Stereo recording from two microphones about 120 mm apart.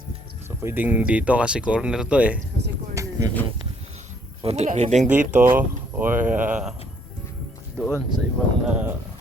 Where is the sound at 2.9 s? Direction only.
25° right (ahead or behind).